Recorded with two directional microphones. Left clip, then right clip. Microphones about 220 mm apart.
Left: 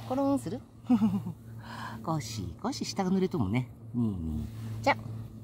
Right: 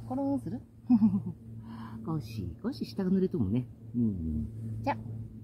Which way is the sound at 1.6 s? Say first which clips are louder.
Left 6 dB; 25° left (ahead or behind).